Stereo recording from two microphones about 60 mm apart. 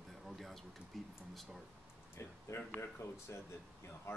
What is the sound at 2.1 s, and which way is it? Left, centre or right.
Speech, left.